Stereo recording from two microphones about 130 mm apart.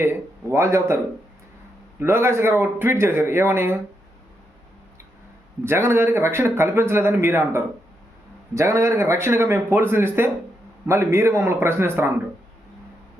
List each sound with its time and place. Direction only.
0.0 s speech: 20° right (ahead or behind)
2.0 s speech: 20° right (ahead or behind)
5.6 s speech: 20° right (ahead or behind)